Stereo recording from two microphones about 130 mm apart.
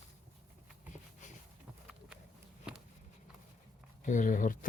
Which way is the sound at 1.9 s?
5° right (ahead or behind).